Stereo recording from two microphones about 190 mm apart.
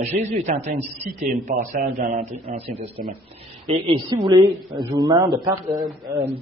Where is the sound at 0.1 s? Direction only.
35° right (ahead or behind).